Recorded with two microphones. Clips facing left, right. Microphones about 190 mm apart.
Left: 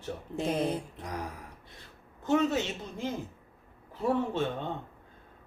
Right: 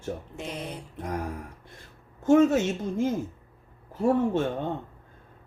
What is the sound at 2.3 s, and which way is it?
Speech, 45° right (ahead or behind).